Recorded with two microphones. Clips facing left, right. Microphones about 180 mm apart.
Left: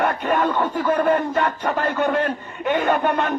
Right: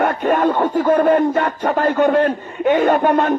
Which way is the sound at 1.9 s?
55° right (ahead or behind).